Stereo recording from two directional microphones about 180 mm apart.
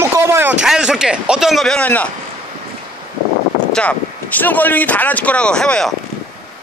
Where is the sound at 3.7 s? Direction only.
5° left (ahead or behind).